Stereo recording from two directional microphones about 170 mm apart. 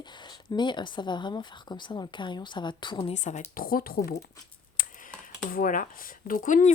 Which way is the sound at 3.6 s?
60° left (ahead or behind).